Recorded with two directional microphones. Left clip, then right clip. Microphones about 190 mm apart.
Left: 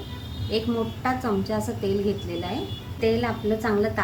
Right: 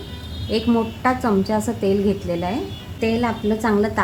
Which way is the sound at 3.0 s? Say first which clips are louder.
Right 3 dB; 60° right (ahead or behind).